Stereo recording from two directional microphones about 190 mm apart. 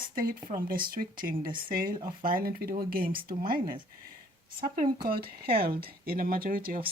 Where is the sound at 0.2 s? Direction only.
45° right (ahead or behind).